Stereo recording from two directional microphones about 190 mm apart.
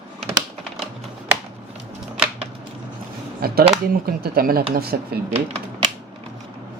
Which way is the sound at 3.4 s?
55° right (ahead or behind).